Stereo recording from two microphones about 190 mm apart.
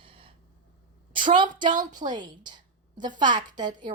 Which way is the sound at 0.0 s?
30° right (ahead or behind).